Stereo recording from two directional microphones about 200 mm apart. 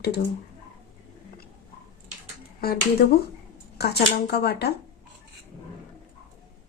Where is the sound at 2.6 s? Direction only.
50° left (ahead or behind).